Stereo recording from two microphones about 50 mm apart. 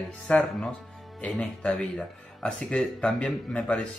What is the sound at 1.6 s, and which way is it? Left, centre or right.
Speech, centre.